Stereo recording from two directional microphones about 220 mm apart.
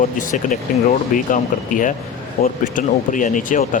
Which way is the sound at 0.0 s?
35° left (ahead or behind).